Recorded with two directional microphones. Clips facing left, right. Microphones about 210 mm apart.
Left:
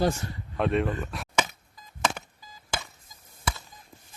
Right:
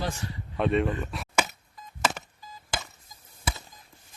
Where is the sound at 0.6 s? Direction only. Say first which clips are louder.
Right 1 dB; centre (ahead or behind).